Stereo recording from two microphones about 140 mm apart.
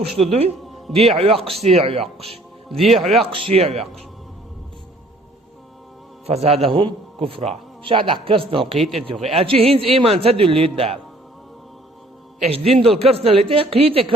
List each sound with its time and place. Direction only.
0.2 s a man's voice: 45° right (ahead or behind)
0.6 s music: centre (ahead or behind)
0.9 s a man's voice: 45° right (ahead or behind)
1.4 s speech: centre (ahead or behind)
1.6 s a man's voice: 45° right (ahead or behind)
2.6 s speech: centre (ahead or behind)
3.3 s a man's voice: 45° right (ahead or behind)
6.2 s a man's voice: 45° right (ahead or behind)
8.8 s speech: centre (ahead or behind)
9.2 s a man's voice: 45° right (ahead or behind)
12.4 s a man's voice: 50° right (ahead or behind)